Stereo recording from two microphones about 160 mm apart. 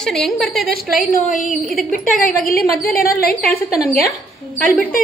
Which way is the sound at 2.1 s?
65° left (ahead or behind).